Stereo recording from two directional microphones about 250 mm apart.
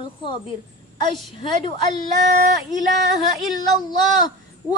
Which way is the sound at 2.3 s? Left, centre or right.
Right.